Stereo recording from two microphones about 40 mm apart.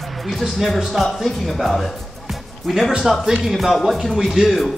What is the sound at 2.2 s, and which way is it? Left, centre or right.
Music, centre.